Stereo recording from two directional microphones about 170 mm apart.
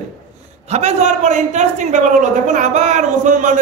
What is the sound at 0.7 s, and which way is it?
A man's voice, 40° right (ahead or behind).